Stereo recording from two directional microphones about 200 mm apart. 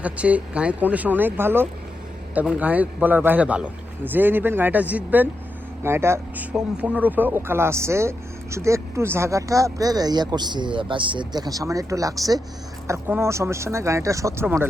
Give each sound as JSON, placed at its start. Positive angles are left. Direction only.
{"t": 0.0, "sound": "speech", "side_deg": -5}